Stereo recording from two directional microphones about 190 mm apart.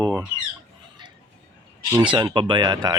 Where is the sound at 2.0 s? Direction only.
25° right (ahead or behind).